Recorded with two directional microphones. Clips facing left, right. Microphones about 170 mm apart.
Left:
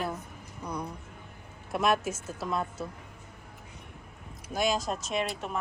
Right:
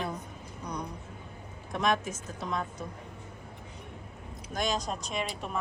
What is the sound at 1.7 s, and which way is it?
A woman's voice, 5° left (ahead or behind).